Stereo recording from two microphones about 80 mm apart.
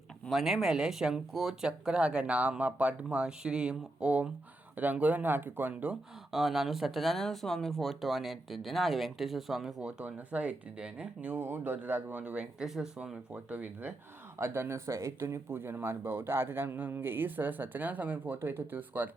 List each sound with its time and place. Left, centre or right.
0.3 s speech: centre
6.3 s speech: centre
10.0 s speech: centre
13.3 s speech: right
14.3 s speech: right